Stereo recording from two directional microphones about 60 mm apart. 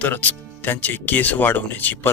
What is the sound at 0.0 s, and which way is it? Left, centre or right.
Speech, left.